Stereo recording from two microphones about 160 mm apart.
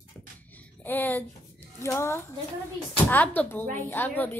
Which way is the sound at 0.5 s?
10° left (ahead or behind).